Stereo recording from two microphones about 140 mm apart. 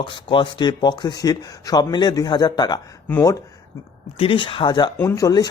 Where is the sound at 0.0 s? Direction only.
35° left (ahead or behind).